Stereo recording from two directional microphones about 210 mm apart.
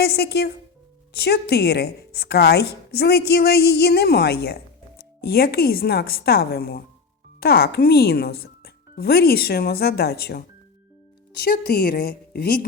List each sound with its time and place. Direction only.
0.0 s a woman's voice: 50° left (ahead or behind)